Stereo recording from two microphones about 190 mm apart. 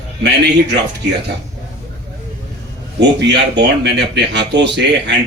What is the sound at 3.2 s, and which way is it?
A man's voice, 65° right (ahead or behind).